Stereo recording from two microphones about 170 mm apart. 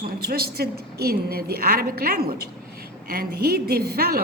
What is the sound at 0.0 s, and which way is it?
A woman's voice, 65° right (ahead or behind).